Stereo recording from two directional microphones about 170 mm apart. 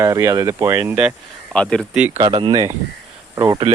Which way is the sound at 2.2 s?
30° right (ahead or behind).